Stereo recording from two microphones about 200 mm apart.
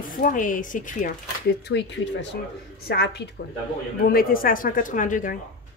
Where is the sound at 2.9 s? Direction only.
55° left (ahead or behind).